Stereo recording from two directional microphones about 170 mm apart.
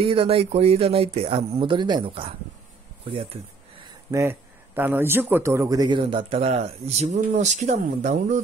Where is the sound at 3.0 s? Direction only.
30° right (ahead or behind).